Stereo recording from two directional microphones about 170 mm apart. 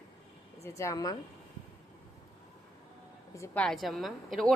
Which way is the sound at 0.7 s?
20° left (ahead or behind).